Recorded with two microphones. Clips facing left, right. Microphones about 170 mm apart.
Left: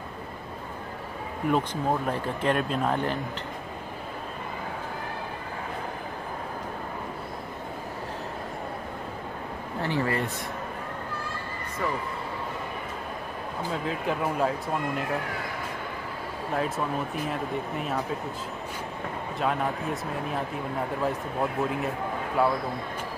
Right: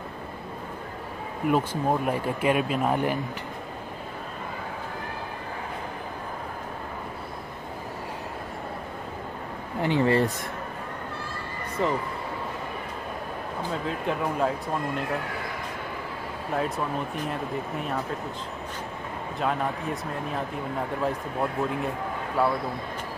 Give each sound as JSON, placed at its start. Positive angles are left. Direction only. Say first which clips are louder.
{"t": 1.5, "sound": "speech", "louder": "right 2 dB", "side_deg": -5}
{"t": 9.8, "sound": "speech", "louder": "right 5 dB", "side_deg": -20}
{"t": 11.8, "sound": "speech", "louder": "right 4 dB", "side_deg": -25}
{"t": 13.7, "sound": "speech", "louder": "even", "side_deg": 0}
{"t": 16.5, "sound": "speech", "louder": "even", "side_deg": 0}
{"t": 19.4, "sound": "speech", "louder": "even", "side_deg": 0}